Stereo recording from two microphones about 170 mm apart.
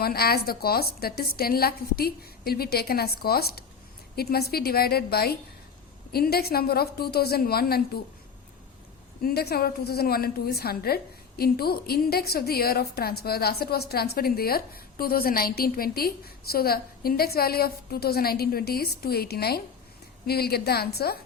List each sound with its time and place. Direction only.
0.0 s a woman's voice: 65° left (ahead or behind)
9.2 s a woman's voice: 70° left (ahead or behind)